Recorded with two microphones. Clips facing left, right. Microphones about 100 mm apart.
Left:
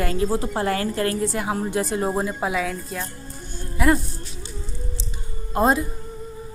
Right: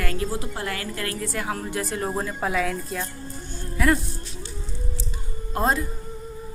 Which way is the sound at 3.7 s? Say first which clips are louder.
Left 2 dB; 20° left (ahead or behind).